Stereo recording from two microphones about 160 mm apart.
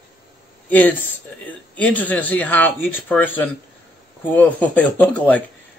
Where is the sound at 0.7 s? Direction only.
10° left (ahead or behind).